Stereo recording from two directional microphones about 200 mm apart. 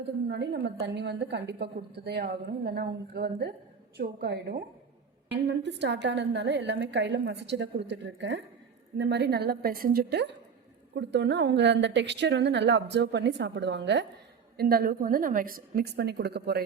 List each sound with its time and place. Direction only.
0.3 s a woman's voice: 55° right (ahead or behind)